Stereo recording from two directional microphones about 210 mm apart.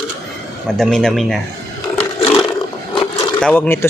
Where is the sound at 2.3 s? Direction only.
20° left (ahead or behind).